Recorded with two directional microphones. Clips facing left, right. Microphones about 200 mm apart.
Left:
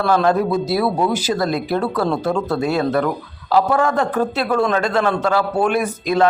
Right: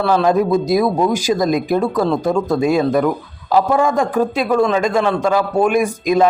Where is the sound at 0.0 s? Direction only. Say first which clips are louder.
Right 2 dB; 10° right (ahead or behind).